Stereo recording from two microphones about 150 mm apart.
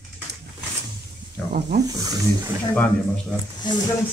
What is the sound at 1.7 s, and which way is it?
Speech, 90° right.